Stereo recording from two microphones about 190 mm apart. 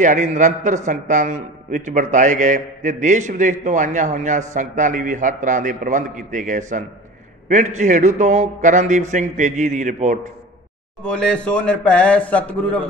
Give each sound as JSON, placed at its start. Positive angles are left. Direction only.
{"t": 0.0, "sound": "a man's voice", "side_deg": -40}
{"t": 11.1, "sound": "speech", "side_deg": 5}